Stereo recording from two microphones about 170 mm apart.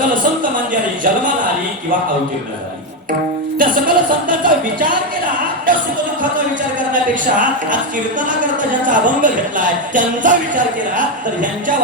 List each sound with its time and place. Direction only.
0.7 s speech: 50° right (ahead or behind)
3.6 s speech: 50° right (ahead or behind)
6.9 s speech: 50° right (ahead or behind)